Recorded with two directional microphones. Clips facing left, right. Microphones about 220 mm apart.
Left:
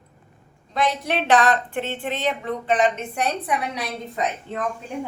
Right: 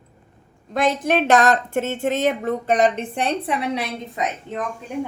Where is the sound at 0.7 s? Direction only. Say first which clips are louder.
Right 4 dB; 50° right (ahead or behind); by 4.6 s 20° right (ahead or behind).